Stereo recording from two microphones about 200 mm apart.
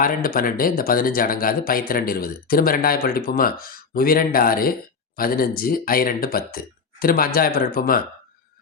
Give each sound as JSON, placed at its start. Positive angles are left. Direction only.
{"t": 0.0, "sound": "speech", "side_deg": 45}